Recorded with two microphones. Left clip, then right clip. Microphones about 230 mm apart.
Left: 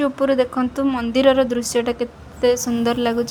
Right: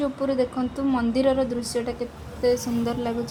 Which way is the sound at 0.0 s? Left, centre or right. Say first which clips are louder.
Left 6 dB; left.